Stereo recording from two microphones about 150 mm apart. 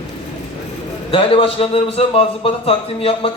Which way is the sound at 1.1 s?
35° left (ahead or behind).